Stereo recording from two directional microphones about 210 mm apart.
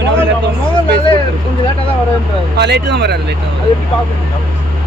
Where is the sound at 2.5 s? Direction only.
55° right (ahead or behind).